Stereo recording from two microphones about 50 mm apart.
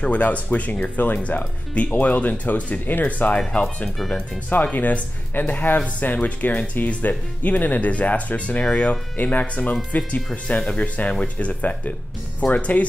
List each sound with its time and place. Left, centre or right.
0.0 s speech: left
4.6 s speech: left
10.6 s speech: centre